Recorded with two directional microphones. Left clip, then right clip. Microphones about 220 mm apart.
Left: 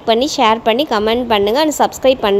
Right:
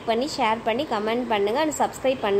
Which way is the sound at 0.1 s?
45° left (ahead or behind).